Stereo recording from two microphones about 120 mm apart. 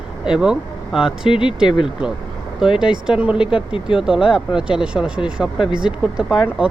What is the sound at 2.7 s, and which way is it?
Speech, 5° right (ahead or behind).